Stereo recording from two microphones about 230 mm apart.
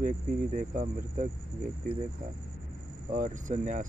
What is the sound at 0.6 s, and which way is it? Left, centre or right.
Speech, right.